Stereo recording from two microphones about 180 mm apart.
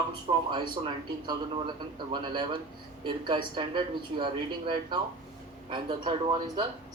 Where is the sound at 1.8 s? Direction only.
25° right (ahead or behind).